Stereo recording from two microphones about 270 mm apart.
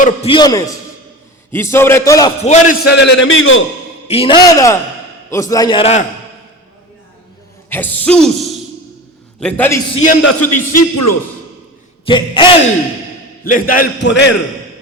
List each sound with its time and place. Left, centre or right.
0.0 s a man's voice: left
2.4 s a man's voice: left
4.1 s a man's voice: centre
7.7 s speech: centre
9.9 s a man's voice: left
10.2 s a man's voice: left
12.0 s a man's voice: centre
13.4 s a man's voice: left